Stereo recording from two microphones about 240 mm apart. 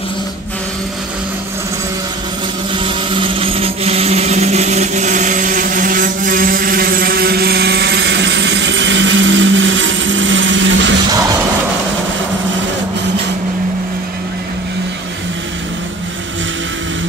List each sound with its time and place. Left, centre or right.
2.7 s blender: right